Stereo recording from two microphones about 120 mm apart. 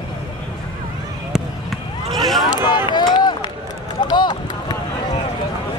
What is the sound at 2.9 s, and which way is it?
Run, 35° left (ahead or behind).